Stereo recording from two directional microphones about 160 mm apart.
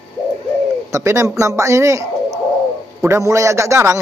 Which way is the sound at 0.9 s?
15° right (ahead or behind).